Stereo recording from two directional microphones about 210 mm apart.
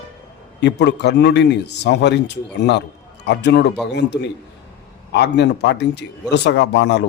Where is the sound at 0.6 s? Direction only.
55° left (ahead or behind).